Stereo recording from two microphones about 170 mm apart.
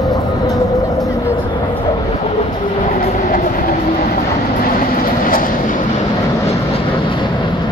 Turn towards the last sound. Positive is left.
turn(degrees=55)  # may be behind; listen again after turning